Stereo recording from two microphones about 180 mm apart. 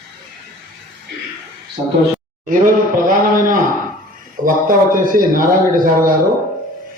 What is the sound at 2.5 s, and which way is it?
A man's voice, 50° right (ahead or behind).